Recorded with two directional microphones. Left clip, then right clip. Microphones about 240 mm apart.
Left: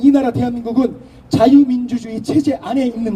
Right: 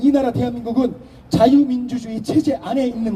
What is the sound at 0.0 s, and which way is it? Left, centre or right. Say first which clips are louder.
A man's voice: left 3 dB; left.